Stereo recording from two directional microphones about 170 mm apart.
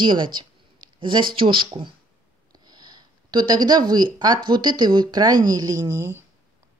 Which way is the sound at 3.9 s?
25° right (ahead or behind).